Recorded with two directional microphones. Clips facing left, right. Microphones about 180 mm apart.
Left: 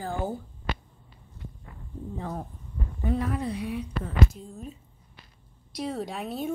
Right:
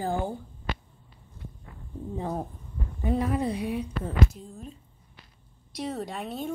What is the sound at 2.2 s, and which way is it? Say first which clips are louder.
A woman's voice: right 5 dB; 20° right (ahead or behind).